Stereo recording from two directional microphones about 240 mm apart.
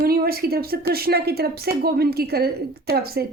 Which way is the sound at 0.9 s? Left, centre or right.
Right.